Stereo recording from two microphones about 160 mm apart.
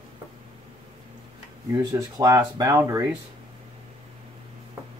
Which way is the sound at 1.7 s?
25° right (ahead or behind).